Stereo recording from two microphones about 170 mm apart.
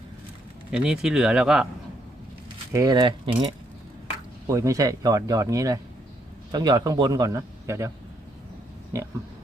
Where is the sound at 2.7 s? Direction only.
25° right (ahead or behind).